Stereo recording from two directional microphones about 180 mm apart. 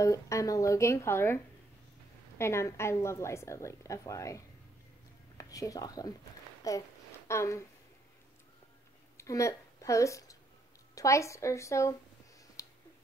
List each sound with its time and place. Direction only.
0.0 s a woman's voice: 15° left (ahead or behind)
5.4 s a woman's voice: 20° left (ahead or behind)
9.1 s a woman's voice: 15° left (ahead or behind)
12.6 s a sound: 20° left (ahead or behind)